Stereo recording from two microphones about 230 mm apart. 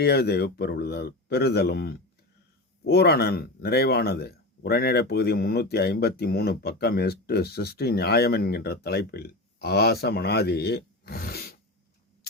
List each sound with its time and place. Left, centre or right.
0.0 s speech: left